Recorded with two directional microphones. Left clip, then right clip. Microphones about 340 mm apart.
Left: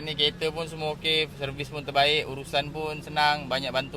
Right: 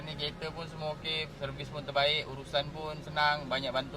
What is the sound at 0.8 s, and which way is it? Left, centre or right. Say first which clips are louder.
Speech: left 9 dB; left.